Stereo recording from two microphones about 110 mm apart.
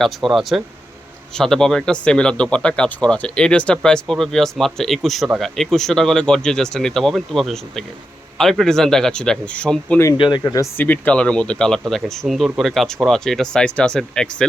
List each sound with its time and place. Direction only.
0.0 s a man's voice: centre (ahead or behind)
10.2 s speech: 45° left (ahead or behind)
10.8 s a man's voice: 15° left (ahead or behind)